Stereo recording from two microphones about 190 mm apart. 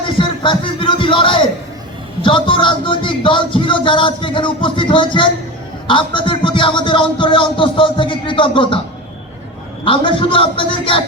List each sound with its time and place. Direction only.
0.2 s speech: 25° left (ahead or behind)
9.8 s speech: 25° left (ahead or behind)